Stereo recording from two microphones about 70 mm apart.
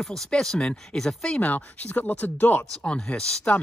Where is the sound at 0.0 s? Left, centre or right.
Centre.